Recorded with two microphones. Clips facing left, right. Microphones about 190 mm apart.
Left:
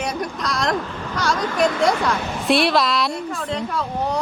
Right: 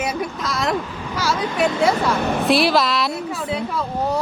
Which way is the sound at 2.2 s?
55° right (ahead or behind).